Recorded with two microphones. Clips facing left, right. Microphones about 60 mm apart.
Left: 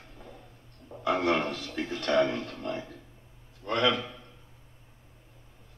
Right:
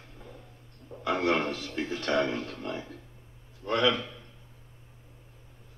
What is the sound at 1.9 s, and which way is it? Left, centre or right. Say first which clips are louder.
Music: left 2 dB; right.